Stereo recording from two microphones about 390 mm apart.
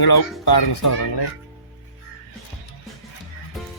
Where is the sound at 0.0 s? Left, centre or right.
Left.